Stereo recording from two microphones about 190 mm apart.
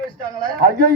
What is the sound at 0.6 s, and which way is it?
Speech, 50° right (ahead or behind).